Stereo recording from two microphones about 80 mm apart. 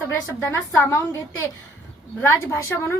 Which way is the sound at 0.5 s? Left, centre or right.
Left.